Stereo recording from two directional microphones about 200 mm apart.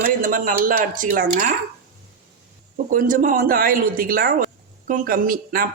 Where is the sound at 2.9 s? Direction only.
40° right (ahead or behind).